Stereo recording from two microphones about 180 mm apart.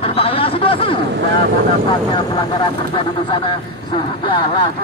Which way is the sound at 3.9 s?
30° left (ahead or behind).